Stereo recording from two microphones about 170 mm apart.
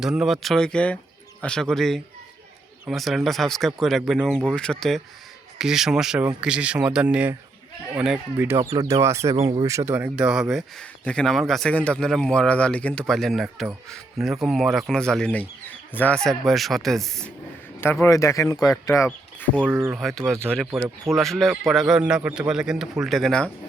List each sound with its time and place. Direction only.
0.0 s speech: 5° right (ahead or behind)
8.7 s speech: 20° right (ahead or behind)
9.3 s speech: 35° right (ahead or behind)
9.6 s speech: 15° right (ahead or behind)
10.5 s speech: 5° left (ahead or behind)
18.0 s speech: 15° left (ahead or behind)
19.7 s speech: 5° right (ahead or behind)
21.1 s speech: centre (ahead or behind)